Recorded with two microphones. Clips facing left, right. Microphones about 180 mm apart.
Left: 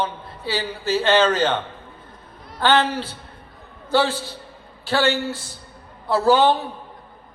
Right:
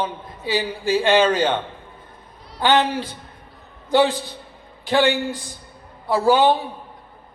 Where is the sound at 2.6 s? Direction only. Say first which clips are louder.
Right 1 dB; 15° right (ahead or behind).